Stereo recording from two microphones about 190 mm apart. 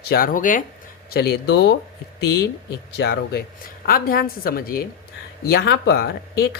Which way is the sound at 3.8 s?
50° left (ahead or behind).